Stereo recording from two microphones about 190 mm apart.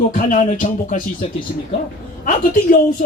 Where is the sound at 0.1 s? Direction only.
40° left (ahead or behind).